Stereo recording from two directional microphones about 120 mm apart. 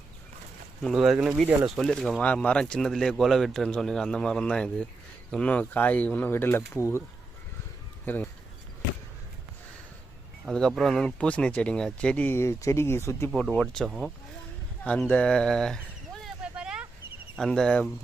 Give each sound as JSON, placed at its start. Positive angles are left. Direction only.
{"t": 0.8, "sound": "a man's voice", "side_deg": 0}
{"t": 8.0, "sound": "speech", "side_deg": 15}
{"t": 10.4, "sound": "speech", "side_deg": 0}
{"t": 13.3, "sound": "a man's voice", "side_deg": 5}
{"t": 15.1, "sound": "a man's voice", "side_deg": 5}
{"t": 16.4, "sound": "vehicle", "side_deg": -10}
{"t": 17.3, "sound": "a man's voice", "side_deg": 5}